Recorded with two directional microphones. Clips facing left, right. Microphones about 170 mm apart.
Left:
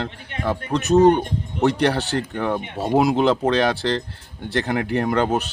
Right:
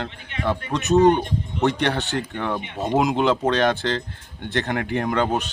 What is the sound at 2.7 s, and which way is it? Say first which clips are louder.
Speech: left 2 dB; 10° left (ahead or behind).